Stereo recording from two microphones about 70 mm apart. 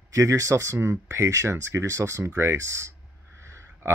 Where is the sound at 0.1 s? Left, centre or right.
Right.